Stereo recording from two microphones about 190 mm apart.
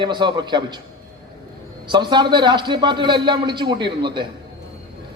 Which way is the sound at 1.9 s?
25° right (ahead or behind).